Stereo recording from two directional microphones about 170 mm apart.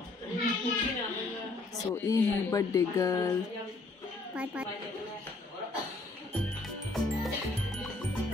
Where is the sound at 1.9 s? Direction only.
20° left (ahead or behind).